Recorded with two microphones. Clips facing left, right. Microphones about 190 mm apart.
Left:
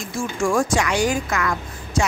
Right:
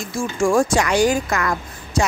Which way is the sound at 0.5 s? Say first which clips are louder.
Right 3 dB; 30° right (ahead or behind).